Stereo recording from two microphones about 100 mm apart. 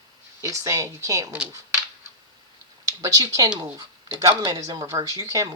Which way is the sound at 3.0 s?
35° right (ahead or behind).